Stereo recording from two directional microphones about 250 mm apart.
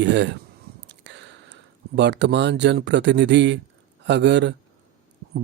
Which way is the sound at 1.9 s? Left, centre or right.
Right.